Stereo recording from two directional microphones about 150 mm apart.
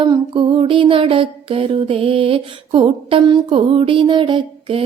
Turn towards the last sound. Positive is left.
turn(degrees=-35)  # may be behind; listen again after turning